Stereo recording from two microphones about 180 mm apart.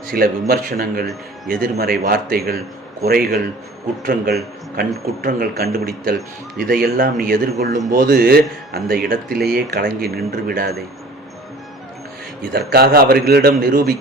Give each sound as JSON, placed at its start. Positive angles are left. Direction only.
{"t": 0.1, "sound": "a man's voice", "side_deg": -55}
{"t": 12.5, "sound": "speech", "side_deg": -60}